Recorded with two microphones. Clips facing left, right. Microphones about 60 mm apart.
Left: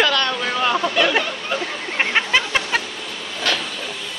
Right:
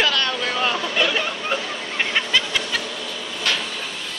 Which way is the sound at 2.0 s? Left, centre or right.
Left.